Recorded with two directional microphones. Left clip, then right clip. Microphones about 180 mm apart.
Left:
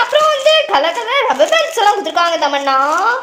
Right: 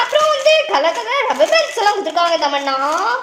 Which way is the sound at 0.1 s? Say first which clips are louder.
Even; 25° left (ahead or behind).